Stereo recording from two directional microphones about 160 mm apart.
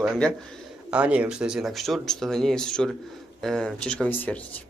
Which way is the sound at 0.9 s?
5° right (ahead or behind).